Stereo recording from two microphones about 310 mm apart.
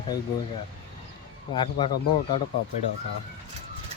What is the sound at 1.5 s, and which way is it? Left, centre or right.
Speech, centre.